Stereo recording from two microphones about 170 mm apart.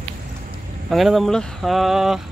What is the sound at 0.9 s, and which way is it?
Speech, centre (ahead or behind).